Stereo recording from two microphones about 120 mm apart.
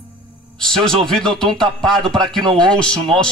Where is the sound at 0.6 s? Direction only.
5° left (ahead or behind).